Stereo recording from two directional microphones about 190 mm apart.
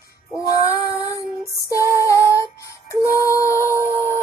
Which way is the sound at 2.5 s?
15° left (ahead or behind).